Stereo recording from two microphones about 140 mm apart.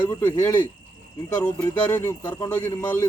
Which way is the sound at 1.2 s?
20° left (ahead or behind).